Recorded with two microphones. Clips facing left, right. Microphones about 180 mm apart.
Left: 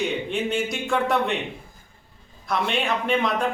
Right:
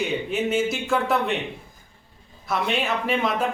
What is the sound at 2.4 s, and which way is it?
A man's voice, centre (ahead or behind).